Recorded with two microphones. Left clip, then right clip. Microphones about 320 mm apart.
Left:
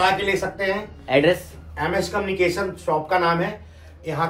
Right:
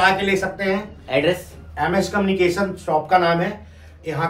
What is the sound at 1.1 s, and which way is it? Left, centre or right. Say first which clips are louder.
Speech: left 2 dB; centre.